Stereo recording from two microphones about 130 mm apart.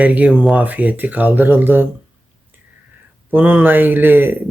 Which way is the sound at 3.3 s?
15° right (ahead or behind).